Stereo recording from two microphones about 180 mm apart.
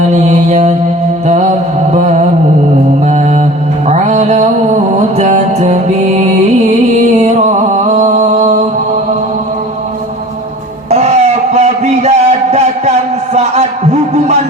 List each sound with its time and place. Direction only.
0.1 s mantra: 40° right (ahead or behind)
1.9 s mantra: 40° right (ahead or behind)
3.8 s music: 40° right (ahead or behind)
7.7 s music: 40° right (ahead or behind)
10.9 s a sound: 40° right (ahead or behind)